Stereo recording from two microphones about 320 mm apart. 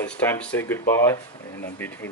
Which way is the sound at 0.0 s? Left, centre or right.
Centre.